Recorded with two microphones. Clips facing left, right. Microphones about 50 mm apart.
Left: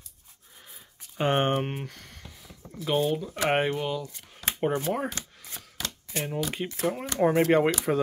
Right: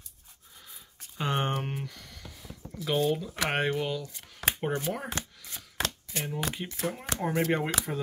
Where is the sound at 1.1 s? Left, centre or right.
Left.